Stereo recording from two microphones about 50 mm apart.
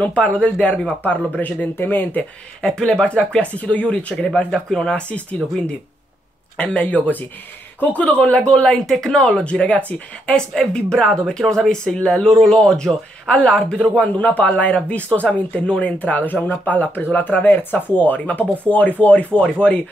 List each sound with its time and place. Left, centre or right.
0.0 s speech: left
2.6 s speech: centre
4.1 s speech: centre
5.1 s speech: left
10.3 s speech: centre
11.1 s speech: centre; by 15.9 s left
16.0 s speech: left